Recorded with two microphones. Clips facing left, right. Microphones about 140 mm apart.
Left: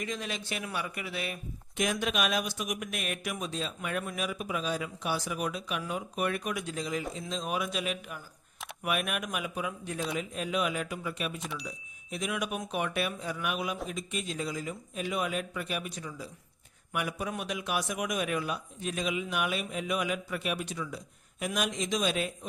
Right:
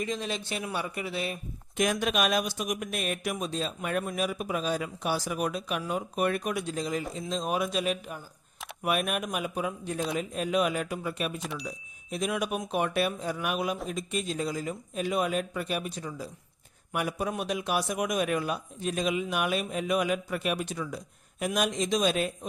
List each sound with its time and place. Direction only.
0.0 s speech: 30° right (ahead or behind)
1.8 s a man's voice: 45° right (ahead or behind)
11.3 s speech: centre (ahead or behind)
12.1 s a man's voice: 35° right (ahead or behind)